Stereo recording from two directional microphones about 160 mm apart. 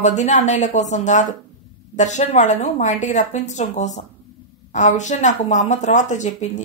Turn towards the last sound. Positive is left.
turn(degrees=45)  # may be behind; listen again after turning